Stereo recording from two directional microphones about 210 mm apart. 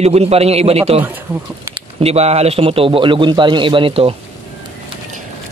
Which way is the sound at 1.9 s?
30° right (ahead or behind).